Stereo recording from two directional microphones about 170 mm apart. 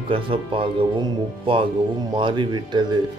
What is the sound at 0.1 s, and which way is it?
Speech, 30° right (ahead or behind).